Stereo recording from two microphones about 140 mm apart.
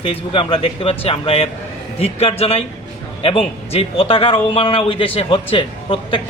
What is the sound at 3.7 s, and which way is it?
Speech, 45° left (ahead or behind).